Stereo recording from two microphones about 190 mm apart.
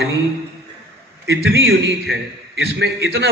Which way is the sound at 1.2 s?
70° right (ahead or behind).